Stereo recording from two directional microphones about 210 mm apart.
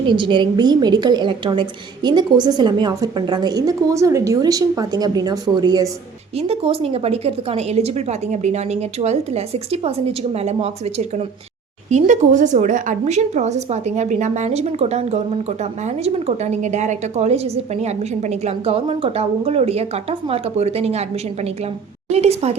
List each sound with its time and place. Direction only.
0.1 s a woman's voice: 20° right (ahead or behind)